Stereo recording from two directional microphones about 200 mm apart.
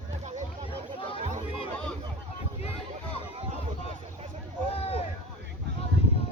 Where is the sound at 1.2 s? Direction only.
35° right (ahead or behind).